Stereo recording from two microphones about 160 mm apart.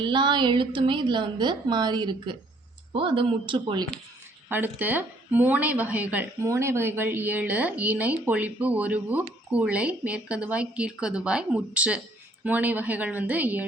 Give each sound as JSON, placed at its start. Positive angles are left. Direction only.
{"t": 0.0, "sound": "a woman's voice", "side_deg": -30}
{"t": 4.4, "sound": "a woman's voice", "side_deg": -10}